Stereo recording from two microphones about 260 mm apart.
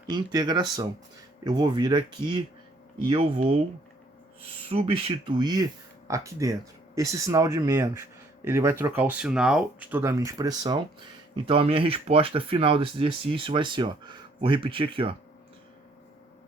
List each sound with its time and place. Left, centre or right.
0.1 s speech: centre
4.7 s speech: right